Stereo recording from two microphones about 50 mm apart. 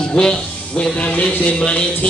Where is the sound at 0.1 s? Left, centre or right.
Centre.